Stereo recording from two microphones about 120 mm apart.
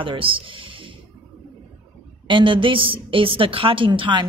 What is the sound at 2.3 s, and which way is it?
A woman's voice, 45° right (ahead or behind).